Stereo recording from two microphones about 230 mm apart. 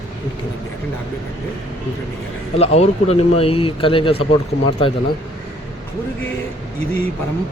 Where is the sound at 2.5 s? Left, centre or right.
Left.